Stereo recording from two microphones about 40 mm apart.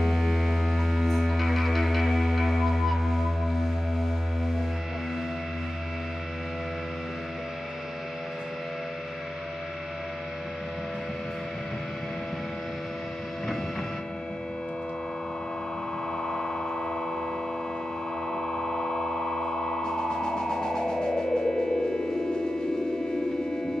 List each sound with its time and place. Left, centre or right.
0.0 s music: centre
16.3 s a sound: centre
18.3 s music: centre